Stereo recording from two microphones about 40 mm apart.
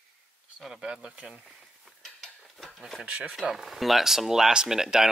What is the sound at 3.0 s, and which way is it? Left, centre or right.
Speech, right.